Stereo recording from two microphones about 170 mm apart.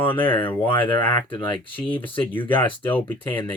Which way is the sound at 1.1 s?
30° left (ahead or behind).